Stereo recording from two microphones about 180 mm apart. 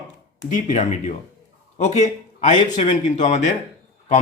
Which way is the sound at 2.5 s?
45° left (ahead or behind).